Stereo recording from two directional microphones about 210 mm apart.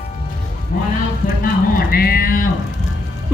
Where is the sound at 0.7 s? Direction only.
40° left (ahead or behind).